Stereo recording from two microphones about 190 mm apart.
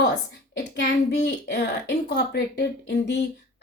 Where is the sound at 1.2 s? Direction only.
65° left (ahead or behind).